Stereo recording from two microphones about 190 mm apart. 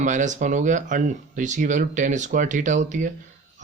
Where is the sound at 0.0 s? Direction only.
40° right (ahead or behind).